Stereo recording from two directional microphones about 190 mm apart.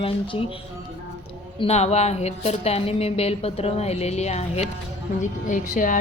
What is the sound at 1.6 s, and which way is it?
Speech, 35° left (ahead or behind).